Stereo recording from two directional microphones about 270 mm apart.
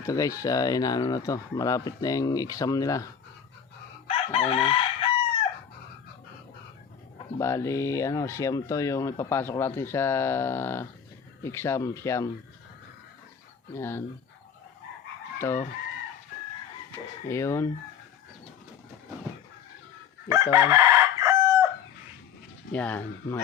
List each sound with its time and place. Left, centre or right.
0.0 s speech: centre
4.0 s chicken: left
7.3 s speech: centre
13.7 s speech: centre
15.4 s chicken: centre
17.2 s speech: centre
20.5 s chicken: centre
22.7 s speech: centre